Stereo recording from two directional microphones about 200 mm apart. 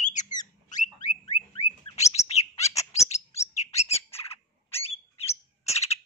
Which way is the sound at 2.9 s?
35° left (ahead or behind).